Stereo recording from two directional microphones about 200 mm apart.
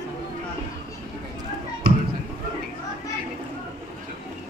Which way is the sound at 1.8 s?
45° right (ahead or behind).